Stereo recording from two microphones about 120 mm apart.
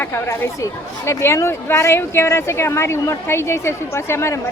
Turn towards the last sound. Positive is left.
turn(degrees=20)  # may be behind; listen again after turning